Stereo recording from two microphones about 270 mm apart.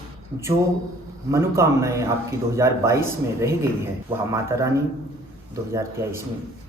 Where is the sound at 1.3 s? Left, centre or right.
Centre.